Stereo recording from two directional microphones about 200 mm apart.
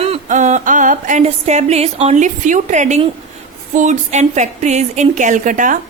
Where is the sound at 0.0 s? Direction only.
35° right (ahead or behind).